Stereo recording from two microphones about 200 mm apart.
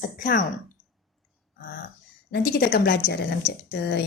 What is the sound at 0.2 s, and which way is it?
Speech, 40° left (ahead or behind).